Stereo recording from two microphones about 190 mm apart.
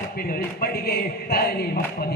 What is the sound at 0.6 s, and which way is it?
Music, 55° left (ahead or behind).